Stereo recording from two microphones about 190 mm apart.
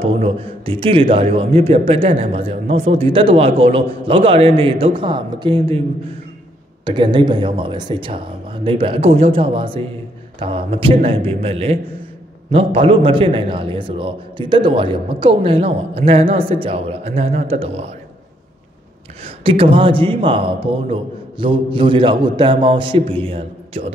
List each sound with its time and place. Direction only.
0.0 s speech: 30° right (ahead or behind)
6.8 s a man's voice: 25° right (ahead or behind)
19.2 s speech: 30° right (ahead or behind)